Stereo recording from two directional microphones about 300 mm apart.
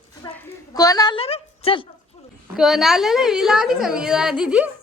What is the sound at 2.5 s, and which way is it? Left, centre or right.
A woman's voice, centre.